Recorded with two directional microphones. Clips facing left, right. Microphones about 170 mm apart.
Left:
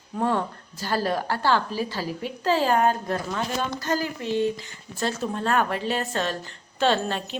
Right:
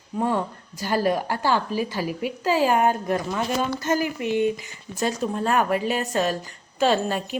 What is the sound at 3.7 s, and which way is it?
A woman's voice, 20° right (ahead or behind).